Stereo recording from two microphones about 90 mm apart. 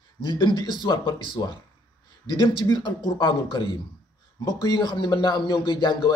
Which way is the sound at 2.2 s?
55° left (ahead or behind).